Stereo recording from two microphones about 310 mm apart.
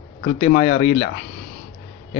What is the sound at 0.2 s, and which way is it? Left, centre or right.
Speech, left.